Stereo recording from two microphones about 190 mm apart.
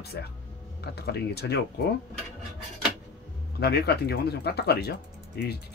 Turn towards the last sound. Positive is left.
turn(degrees=60)  # may be behind; listen again after turning